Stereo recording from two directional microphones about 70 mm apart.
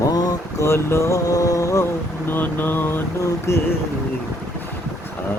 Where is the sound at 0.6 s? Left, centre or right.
Left.